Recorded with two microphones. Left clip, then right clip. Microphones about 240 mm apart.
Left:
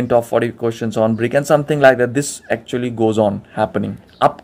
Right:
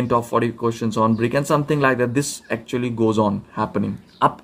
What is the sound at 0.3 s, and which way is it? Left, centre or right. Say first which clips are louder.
Speech: left 3 dB; centre.